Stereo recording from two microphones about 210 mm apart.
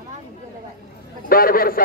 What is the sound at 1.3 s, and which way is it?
Speech, 45° left (ahead or behind).